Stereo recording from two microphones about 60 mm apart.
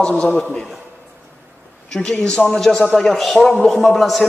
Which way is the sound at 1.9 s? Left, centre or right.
Centre.